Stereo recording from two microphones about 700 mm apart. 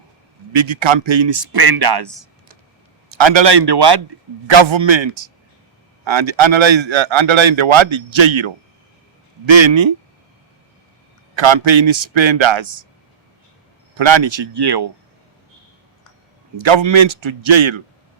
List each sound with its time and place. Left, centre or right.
0.5 s a man's voice: right
3.1 s a man's voice: right
11.3 s a man's voice: right
13.9 s a man's voice: right
16.6 s a man's voice: right